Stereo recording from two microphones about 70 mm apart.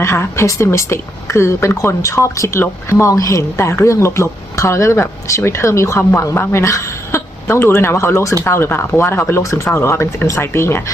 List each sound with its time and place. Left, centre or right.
0.0 s speech: left